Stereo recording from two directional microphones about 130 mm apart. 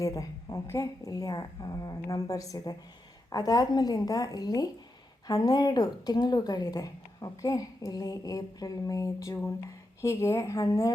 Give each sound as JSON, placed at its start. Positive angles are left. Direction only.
{"t": 0.0, "sound": "speech", "side_deg": 25}